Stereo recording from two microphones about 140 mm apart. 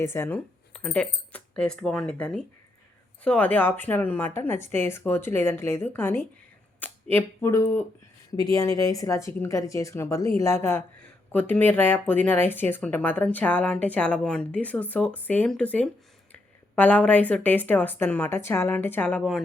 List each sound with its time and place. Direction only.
0.0 s speech: 20° left (ahead or behind)